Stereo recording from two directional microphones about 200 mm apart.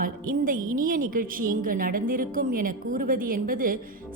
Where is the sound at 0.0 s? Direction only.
45° right (ahead or behind).